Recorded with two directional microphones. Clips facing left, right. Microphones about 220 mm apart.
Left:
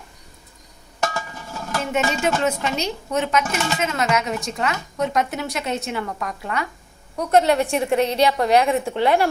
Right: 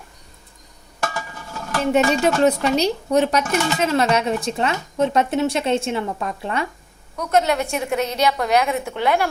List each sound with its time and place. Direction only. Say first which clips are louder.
1.9 s speech: right 5 dB; 35° right (ahead or behind)
7.2 s a woman's voice: left 2 dB; 35° left (ahead or behind)